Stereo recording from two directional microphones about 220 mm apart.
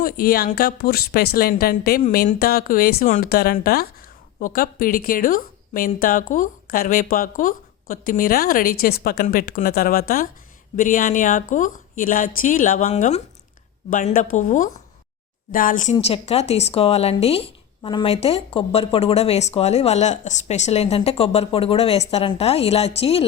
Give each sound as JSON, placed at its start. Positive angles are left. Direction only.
{"t": 0.0, "sound": "a woman's voice", "side_deg": 45}